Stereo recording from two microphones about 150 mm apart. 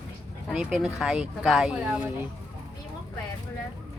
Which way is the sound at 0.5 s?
5° right (ahead or behind).